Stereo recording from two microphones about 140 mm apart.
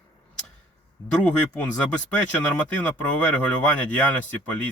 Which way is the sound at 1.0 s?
20° left (ahead or behind).